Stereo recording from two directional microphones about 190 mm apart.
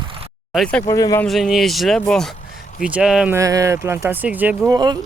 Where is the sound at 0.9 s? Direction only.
15° left (ahead or behind).